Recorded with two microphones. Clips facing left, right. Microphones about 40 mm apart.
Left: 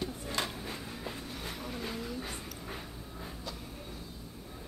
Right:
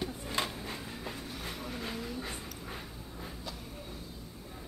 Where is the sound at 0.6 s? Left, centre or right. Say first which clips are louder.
Even; centre.